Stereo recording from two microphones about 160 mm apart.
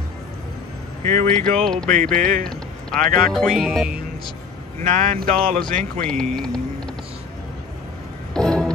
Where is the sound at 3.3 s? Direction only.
Centre (ahead or behind).